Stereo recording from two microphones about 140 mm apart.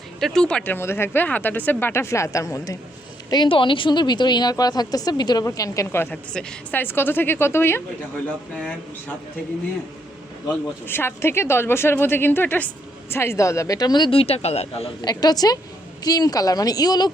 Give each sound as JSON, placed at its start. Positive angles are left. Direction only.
{"t": 0.2, "sound": "a woman's voice", "side_deg": 5}
{"t": 10.8, "sound": "a woman's voice", "side_deg": 15}
{"t": 15.0, "sound": "speech", "side_deg": 30}